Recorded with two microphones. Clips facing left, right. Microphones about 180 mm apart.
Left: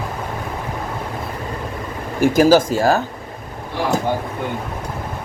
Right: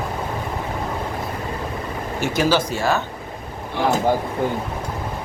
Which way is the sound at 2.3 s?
40° left (ahead or behind).